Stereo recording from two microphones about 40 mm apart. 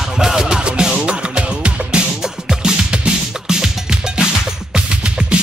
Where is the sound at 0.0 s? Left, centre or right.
Centre.